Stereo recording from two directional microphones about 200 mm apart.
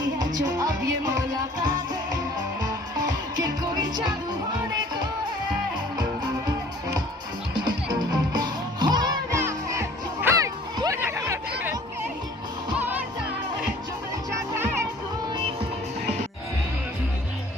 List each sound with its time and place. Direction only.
0.3 s music: 20° right (ahead or behind)
2.6 s music: 20° right (ahead or behind)
7.6 s music: 20° right (ahead or behind)
14.5 s music: 10° right (ahead or behind)